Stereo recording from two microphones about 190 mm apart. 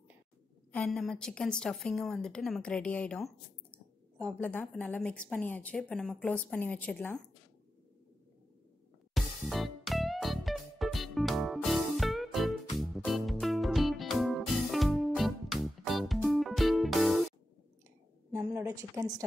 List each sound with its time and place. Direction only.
0.7 s a woman's voice: 5° left (ahead or behind)
9.1 s music: centre (ahead or behind)
18.3 s a sound: 15° right (ahead or behind)